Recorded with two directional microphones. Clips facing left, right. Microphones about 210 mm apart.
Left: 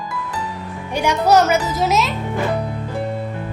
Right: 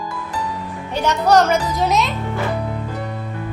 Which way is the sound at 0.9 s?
10° left (ahead or behind).